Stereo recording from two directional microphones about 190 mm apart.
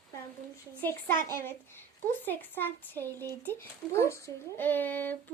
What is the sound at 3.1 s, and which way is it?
Speech, 20° right (ahead or behind).